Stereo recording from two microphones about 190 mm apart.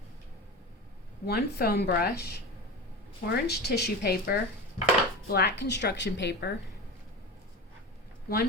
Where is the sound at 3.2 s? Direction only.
60° left (ahead or behind).